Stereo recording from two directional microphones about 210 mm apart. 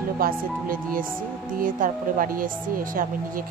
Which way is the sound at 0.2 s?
40° right (ahead or behind).